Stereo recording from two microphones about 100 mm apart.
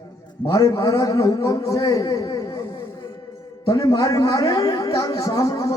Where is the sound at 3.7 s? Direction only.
35° left (ahead or behind).